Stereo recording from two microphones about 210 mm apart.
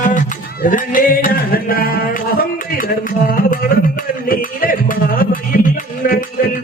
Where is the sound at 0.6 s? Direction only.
40° left (ahead or behind).